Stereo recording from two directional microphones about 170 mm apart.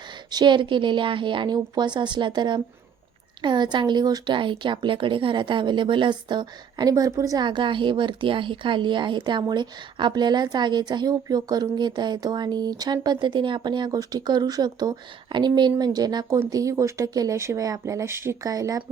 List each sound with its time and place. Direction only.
0.3 s speech: 25° right (ahead or behind)